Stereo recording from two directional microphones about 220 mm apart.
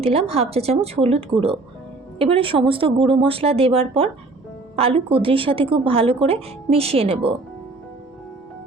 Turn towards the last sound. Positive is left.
turn(degrees=-25)  # may be behind; listen again after turning